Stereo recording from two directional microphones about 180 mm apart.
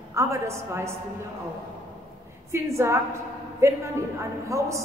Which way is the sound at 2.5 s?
15° right (ahead or behind).